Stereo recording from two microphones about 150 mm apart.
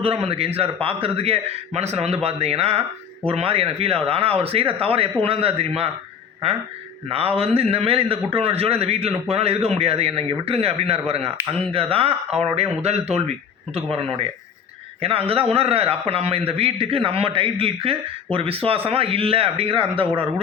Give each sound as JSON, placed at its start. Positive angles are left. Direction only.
{"t": 0.0, "sound": "speech", "side_deg": -40}
{"t": 7.1, "sound": "speech", "side_deg": -40}